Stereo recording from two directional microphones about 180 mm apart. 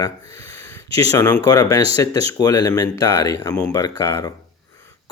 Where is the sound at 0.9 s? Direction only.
20° left (ahead or behind).